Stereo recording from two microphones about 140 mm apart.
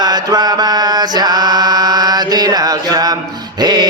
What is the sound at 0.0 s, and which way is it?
Mantra, 30° right (ahead or behind).